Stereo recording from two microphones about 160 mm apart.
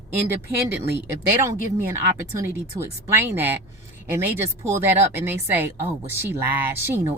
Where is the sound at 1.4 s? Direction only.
15° right (ahead or behind).